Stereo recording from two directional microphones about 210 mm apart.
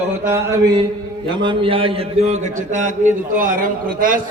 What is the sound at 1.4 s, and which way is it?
A man's voice, 25° right (ahead or behind).